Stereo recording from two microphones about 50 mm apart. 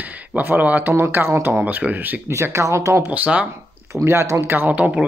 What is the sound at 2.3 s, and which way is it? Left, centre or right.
Speech, right.